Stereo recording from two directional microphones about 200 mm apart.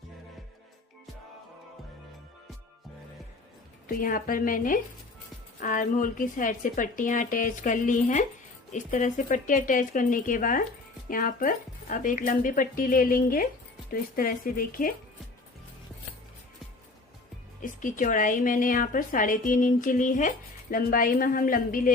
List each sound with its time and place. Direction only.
3.8 s a woman's voice: 45° left (ahead or behind)
17.6 s a woman's voice: 40° left (ahead or behind)